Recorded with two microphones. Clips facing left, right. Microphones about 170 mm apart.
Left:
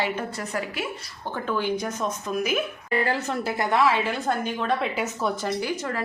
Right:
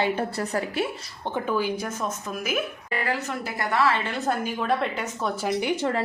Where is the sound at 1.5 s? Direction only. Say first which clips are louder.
Left 1 dB; 5° right (ahead or behind).